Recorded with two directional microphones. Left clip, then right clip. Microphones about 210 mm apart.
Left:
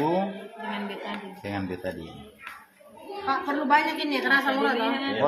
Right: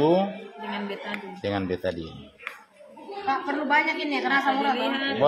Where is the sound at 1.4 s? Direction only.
55° right (ahead or behind).